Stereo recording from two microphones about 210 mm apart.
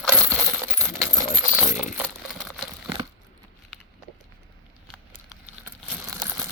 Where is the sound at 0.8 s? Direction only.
Centre (ahead or behind).